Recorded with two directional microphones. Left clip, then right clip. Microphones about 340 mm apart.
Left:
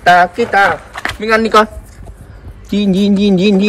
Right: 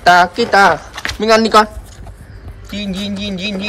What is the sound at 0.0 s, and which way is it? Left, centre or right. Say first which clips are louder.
Speech: left 1 dB; centre.